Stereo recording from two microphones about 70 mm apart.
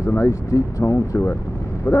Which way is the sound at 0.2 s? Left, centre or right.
Left.